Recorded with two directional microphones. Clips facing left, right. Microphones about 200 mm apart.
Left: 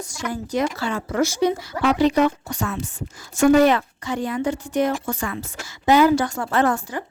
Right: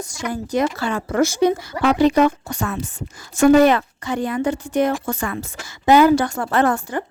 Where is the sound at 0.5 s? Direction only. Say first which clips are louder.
Right 3 dB; 55° right (ahead or behind).